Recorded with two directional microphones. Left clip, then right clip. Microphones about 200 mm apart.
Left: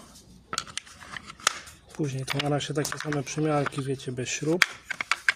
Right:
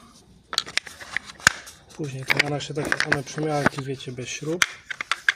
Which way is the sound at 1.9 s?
20° left (ahead or behind).